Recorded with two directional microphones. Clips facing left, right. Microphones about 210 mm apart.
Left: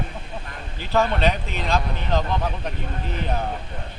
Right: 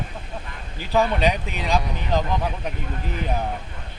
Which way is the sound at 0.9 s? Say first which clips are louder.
Right 1 dB; 10° right (ahead or behind).